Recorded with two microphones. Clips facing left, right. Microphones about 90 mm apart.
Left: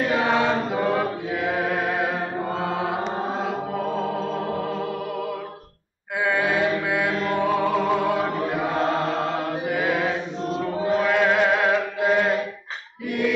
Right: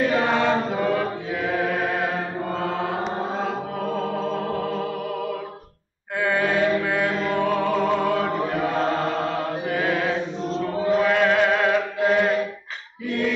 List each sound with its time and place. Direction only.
0.1 s chant: 15° left (ahead or behind)
2.6 s mantra: 15° left (ahead or behind)
4.0 s music: 15° left (ahead or behind)
6.1 s chant: 15° left (ahead or behind)
6.8 s mantra: 15° left (ahead or behind)
7.3 s music: 10° left (ahead or behind)
8.5 s mantra: 15° left (ahead or behind)
10.5 s chant: 15° left (ahead or behind)